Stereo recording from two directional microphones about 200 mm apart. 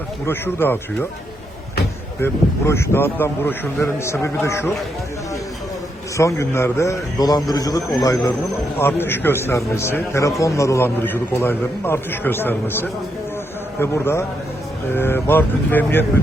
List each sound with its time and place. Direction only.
0.3 s a man's voice: 10° left (ahead or behind)
2.2 s a man's voice: 15° left (ahead or behind)
6.1 s a man's voice: 15° left (ahead or behind)